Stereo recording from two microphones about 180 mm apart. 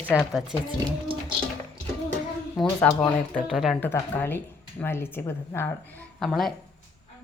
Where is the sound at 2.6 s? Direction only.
10° left (ahead or behind).